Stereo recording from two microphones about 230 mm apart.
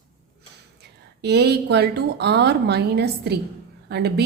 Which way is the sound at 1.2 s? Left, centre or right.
Right.